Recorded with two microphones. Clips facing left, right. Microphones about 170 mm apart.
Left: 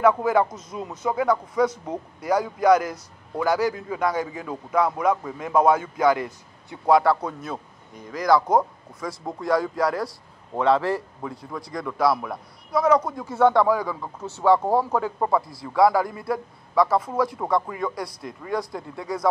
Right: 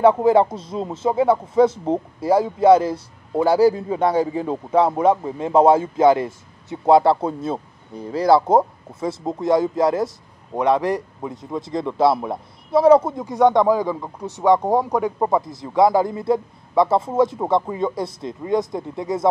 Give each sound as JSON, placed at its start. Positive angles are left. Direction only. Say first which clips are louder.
{"t": 0.0, "sound": "a man's voice", "louder": "right 5 dB", "side_deg": -25}